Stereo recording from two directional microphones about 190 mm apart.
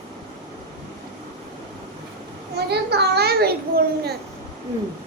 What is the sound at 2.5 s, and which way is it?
A child's voice, 60° right (ahead or behind).